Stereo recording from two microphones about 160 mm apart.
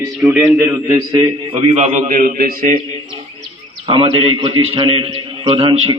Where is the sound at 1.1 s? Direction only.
30° right (ahead or behind); by 2.8 s 60° right (ahead or behind).